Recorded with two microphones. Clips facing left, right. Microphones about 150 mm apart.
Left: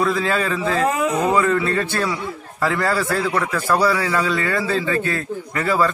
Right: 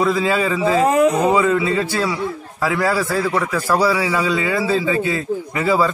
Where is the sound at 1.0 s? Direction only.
25° right (ahead or behind).